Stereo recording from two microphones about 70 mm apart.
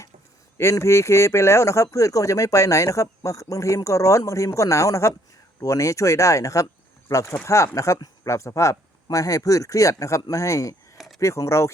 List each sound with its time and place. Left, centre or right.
0.6 s speech: left
10.9 s a sound: centre
11.2 s speech: left